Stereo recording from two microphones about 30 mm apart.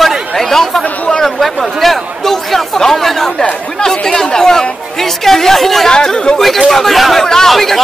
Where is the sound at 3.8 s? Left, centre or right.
Left; by 5.8 s centre.